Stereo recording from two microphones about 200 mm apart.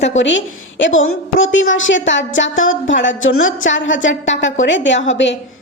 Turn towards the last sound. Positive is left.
turn(degrees=65)  # may be behind; listen again after turning